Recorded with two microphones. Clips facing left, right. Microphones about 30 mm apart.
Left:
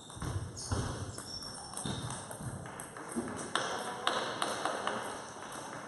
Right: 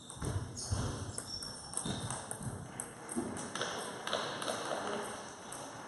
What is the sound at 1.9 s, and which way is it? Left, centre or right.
Ping, centre.